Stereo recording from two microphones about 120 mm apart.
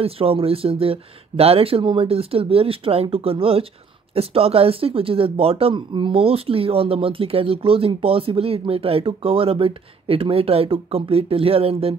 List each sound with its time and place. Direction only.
0.0 s speech: 50° right (ahead or behind)